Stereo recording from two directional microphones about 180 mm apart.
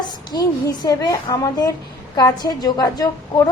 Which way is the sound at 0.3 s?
25° left (ahead or behind).